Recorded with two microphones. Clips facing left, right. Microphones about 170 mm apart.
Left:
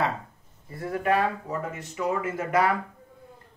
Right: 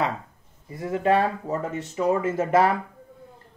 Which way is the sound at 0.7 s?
20° right (ahead or behind).